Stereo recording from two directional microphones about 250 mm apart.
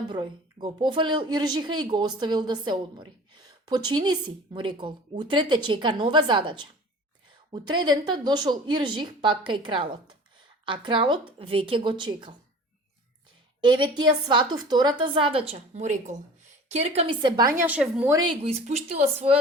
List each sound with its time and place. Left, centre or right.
0.1 s a woman's voice: centre
13.7 s a woman's voice: centre
18.3 s a woman's voice: right